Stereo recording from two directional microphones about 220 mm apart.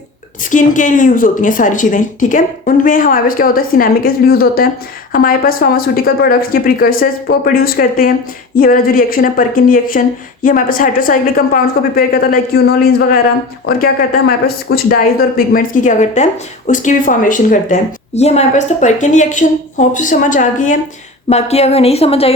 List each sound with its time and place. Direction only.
0.5 s a woman's voice: 35° left (ahead or behind)